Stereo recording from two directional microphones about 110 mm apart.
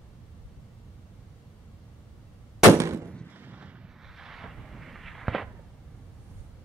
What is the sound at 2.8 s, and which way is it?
Gunshot, 25° right (ahead or behind).